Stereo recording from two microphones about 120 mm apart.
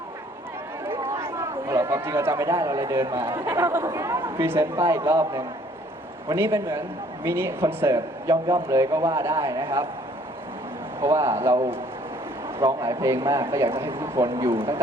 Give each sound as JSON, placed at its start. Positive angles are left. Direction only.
{"t": 0.9, "sound": "a man's voice", "side_deg": -20}
{"t": 11.0, "sound": "a man's voice", "side_deg": -25}